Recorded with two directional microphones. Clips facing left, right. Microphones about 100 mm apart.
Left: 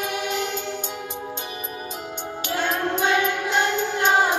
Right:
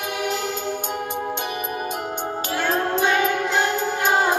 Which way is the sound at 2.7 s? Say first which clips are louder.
Right 4 dB; 35° right (ahead or behind).